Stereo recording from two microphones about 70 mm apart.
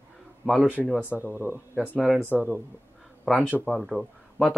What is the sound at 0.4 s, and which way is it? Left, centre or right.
Speech, centre.